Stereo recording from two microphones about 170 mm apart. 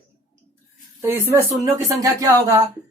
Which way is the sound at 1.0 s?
15° right (ahead or behind).